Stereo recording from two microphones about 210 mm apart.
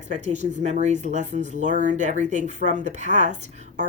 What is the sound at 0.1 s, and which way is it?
Speech, 35° right (ahead or behind).